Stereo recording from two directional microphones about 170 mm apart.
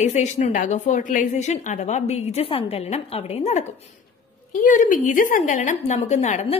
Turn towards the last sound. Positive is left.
turn(degrees=40)  # may be behind; listen again after turning